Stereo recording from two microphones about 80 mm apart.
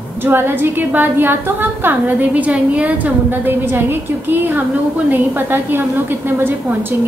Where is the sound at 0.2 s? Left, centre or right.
Right.